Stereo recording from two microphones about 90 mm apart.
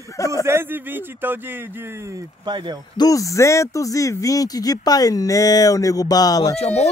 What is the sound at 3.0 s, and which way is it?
Speech, 40° left (ahead or behind).